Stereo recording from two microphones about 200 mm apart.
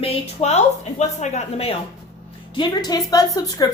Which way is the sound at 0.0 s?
30° left (ahead or behind).